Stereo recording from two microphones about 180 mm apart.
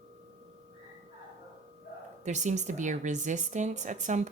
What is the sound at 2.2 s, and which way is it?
Speech, 40° right (ahead or behind).